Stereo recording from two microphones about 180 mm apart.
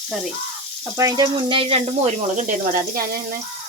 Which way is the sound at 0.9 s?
20° right (ahead or behind).